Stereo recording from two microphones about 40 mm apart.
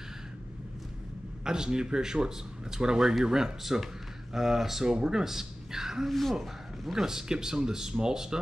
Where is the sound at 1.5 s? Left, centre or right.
Centre.